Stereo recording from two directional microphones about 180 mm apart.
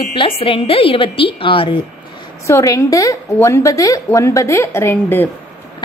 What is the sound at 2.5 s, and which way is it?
A woman's voice, 15° left (ahead or behind).